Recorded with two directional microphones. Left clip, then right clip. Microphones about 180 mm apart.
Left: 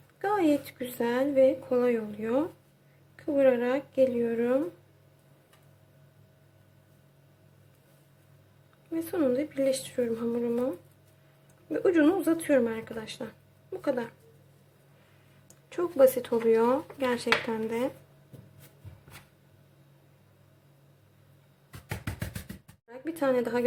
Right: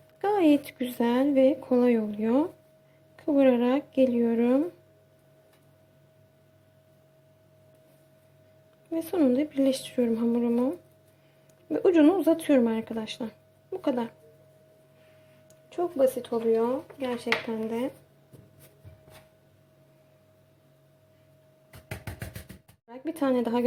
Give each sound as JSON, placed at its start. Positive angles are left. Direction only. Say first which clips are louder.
{"t": 0.2, "sound": "speech", "louder": "right 3 dB", "side_deg": -30}
{"t": 8.9, "sound": "speech", "louder": "right 2 dB", "side_deg": -30}
{"t": 11.7, "sound": "speech", "louder": "right 3 dB", "side_deg": -25}
{"t": 15.7, "sound": "speech", "louder": "left 2 dB", "side_deg": 0}
{"t": 22.9, "sound": "a woman's voice", "louder": "even", "side_deg": -20}